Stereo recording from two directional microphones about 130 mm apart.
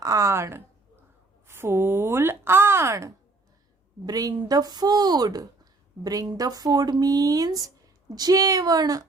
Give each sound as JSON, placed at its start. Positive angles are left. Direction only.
{"t": 0.0, "sound": "a woman's voice", "side_deg": -25}